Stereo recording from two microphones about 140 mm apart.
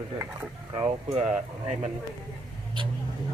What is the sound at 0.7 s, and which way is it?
Speech, 40° right (ahead or behind).